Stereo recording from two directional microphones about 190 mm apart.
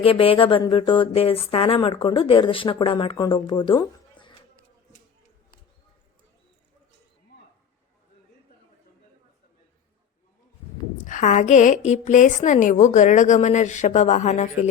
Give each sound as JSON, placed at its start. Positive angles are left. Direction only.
{"t": 0.0, "sound": "speech", "side_deg": 30}
{"t": 11.0, "sound": "a woman's voice", "side_deg": 40}